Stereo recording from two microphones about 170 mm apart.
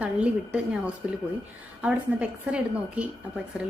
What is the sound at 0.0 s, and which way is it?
A woman's voice, 5° right (ahead or behind).